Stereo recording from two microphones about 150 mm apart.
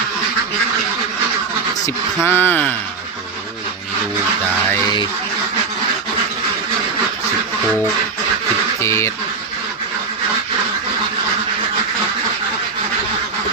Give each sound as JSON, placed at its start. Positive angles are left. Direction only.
{"t": 2.2, "sound": "speech", "side_deg": 15}
{"t": 8.8, "sound": "speech", "side_deg": 20}